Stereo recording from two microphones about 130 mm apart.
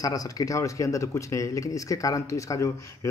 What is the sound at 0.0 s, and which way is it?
Speech, 30° left (ahead or behind).